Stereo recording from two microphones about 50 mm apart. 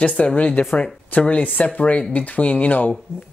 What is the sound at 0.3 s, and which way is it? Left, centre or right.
Speech, left.